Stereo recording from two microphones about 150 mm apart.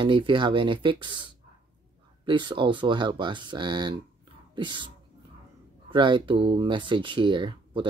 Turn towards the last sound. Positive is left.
turn(degrees=-30)  # may be behind; listen again after turning